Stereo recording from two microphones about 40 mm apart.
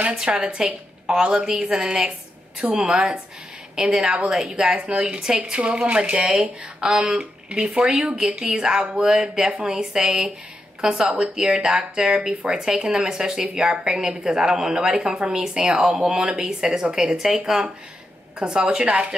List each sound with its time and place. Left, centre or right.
0.1 s speech: centre
4.7 s speech: right
5.4 s speech: right
16.3 s speech: centre
18.4 s speech: centre